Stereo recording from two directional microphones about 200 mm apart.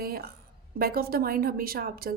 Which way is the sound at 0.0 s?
50° right (ahead or behind).